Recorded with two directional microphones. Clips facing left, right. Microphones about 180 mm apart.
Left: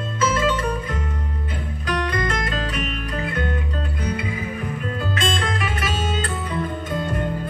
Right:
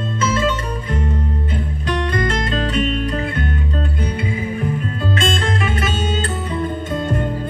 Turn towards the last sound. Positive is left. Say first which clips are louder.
# right 4 dB
turn(degrees=-25)  # may be behind; listen again after turning